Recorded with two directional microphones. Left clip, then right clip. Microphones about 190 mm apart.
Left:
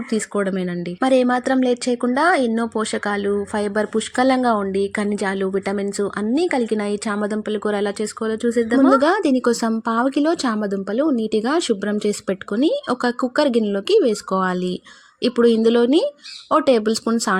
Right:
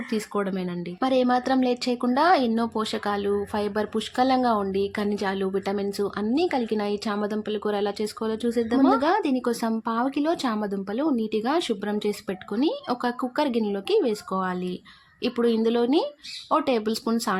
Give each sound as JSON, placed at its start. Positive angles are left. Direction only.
{"t": 0.1, "sound": "speech", "side_deg": 20}